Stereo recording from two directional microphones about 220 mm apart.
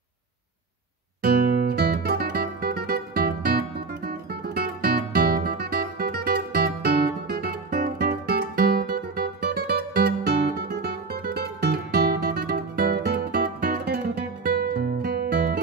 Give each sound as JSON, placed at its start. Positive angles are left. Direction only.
{"t": 1.2, "sound": "music", "side_deg": -45}